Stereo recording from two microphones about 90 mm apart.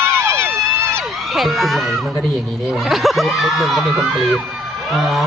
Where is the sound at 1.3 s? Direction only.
Centre (ahead or behind).